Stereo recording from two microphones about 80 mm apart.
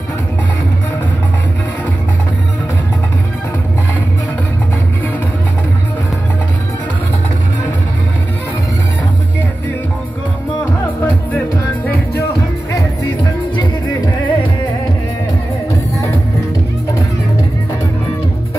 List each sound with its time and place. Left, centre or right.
13.2 s music: left